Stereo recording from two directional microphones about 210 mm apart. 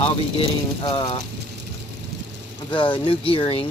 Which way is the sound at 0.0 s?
30° left (ahead or behind).